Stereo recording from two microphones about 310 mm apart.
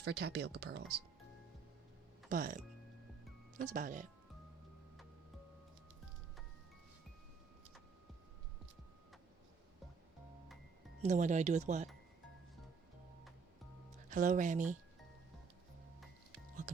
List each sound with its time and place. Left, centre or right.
0.0 s speech: right
2.3 s speech: right
3.6 s speech: right
11.0 s speech: right
14.1 s speech: right
16.7 s speech: right